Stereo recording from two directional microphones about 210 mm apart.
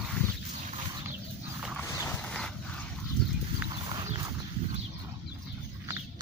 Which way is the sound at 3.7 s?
20° right (ahead or behind).